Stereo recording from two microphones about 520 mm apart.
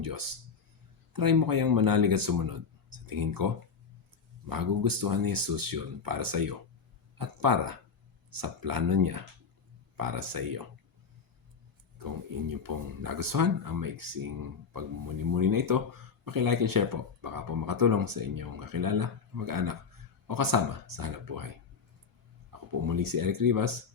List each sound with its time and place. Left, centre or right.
0.0 s speech: right
11.9 s speech: right
22.9 s speech: right